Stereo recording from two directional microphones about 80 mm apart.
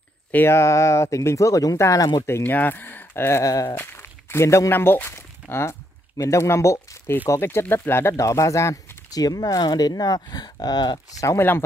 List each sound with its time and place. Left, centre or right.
0.3 s speech: left
2.2 s speech: left
3.4 s speech: left
3.7 s speech: left
9.2 s speech: left